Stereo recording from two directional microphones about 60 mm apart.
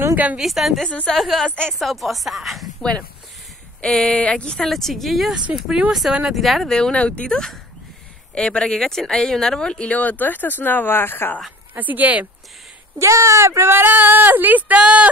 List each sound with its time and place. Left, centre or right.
0.4 s speech: centre
0.8 s speech: centre
1.1 s speech: centre
1.5 s speech: centre
1.8 s speech: centre
3.8 s speech: centre
4.6 s speech: centre
5.3 s speech: centre
7.0 s speech: centre
7.2 s speech: centre; by 11.3 s left
11.7 s speech: right
13.0 s speech: right
13.7 s speech: right